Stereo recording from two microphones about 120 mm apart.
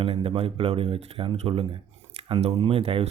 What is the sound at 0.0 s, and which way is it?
Speech, 50° right (ahead or behind).